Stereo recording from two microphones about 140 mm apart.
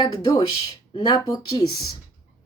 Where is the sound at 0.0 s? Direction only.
30° left (ahead or behind).